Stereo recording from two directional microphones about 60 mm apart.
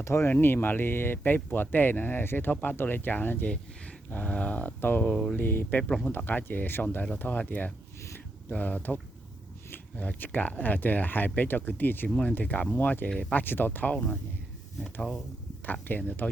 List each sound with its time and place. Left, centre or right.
0.0 s speech: left
0.3 s speech: left
5.1 s speech: centre
5.4 s speech: left
12.0 s speech: centre
12.3 s speech: left
15.6 s speech: left